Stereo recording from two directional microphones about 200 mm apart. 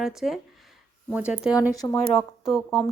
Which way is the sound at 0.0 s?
Centre (ahead or behind).